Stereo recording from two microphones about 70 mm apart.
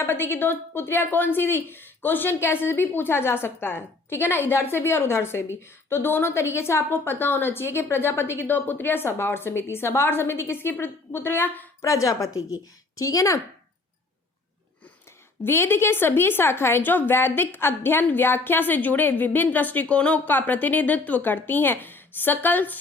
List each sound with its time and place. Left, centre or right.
0.0 s speech: left
11.8 s a woman's voice: left
15.4 s a woman's voice: left